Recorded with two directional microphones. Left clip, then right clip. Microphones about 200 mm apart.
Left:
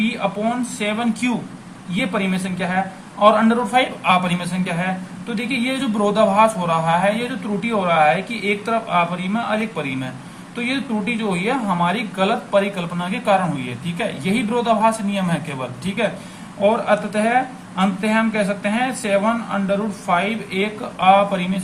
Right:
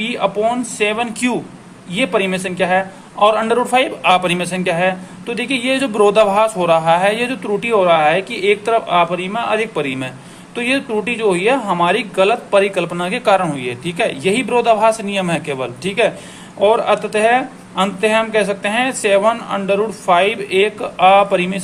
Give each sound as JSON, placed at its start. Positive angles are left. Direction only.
{"t": 0.0, "sound": "speech", "side_deg": -45}